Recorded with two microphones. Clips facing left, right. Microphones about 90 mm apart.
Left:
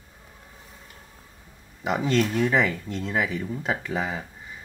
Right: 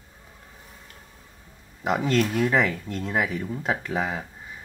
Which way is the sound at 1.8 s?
Centre (ahead or behind).